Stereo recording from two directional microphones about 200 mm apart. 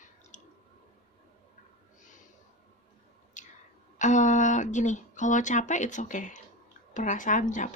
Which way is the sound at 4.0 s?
35° left (ahead or behind).